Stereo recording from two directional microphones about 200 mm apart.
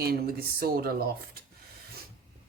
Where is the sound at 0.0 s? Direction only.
50° right (ahead or behind).